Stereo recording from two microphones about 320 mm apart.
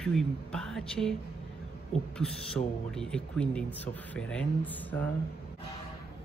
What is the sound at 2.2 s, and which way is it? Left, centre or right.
Speech, centre.